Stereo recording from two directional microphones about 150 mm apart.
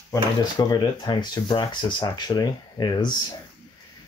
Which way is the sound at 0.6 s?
25° left (ahead or behind).